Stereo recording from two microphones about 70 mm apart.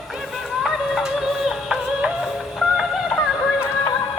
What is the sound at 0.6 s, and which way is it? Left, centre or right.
Music, centre.